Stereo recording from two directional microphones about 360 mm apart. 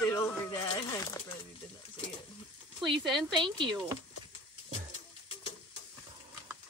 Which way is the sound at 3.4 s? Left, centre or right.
Centre.